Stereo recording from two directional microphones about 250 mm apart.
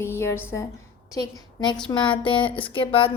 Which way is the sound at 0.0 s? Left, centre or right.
Centre.